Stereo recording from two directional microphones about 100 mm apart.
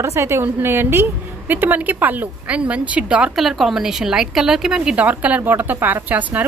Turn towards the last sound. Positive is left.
turn(degrees=-15)  # may be behind; listen again after turning